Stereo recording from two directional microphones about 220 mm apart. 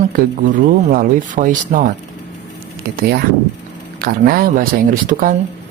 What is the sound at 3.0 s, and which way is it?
Speech, 45° right (ahead or behind).